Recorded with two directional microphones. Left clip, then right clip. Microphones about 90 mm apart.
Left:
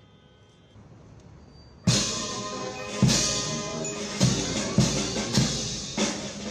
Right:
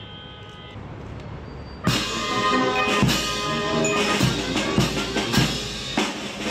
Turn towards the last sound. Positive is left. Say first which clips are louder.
# right 4 dB
turn(degrees=-35)  # may be behind; listen again after turning